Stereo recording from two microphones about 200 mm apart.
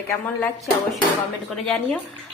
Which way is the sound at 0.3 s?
5° left (ahead or behind).